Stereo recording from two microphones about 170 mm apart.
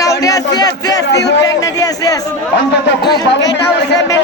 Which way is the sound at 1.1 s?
90° left.